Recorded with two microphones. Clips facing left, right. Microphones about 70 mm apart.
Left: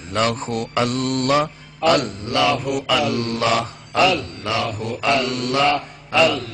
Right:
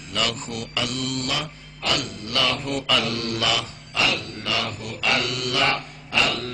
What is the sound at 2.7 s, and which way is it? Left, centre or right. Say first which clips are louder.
Mantra: left 4 dB; centre.